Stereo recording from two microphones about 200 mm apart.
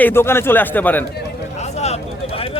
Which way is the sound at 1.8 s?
30° left (ahead or behind).